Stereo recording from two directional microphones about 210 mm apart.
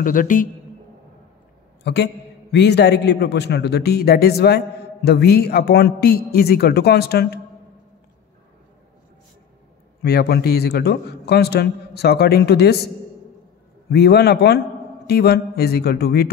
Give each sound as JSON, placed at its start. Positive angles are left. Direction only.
{"t": 0.0, "sound": "a man's voice", "side_deg": 40}
{"t": 1.8, "sound": "a man's voice", "side_deg": 50}
{"t": 10.0, "sound": "a man's voice", "side_deg": 50}